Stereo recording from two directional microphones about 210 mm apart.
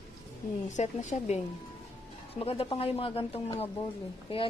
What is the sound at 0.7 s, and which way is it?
Speech, 35° left (ahead or behind).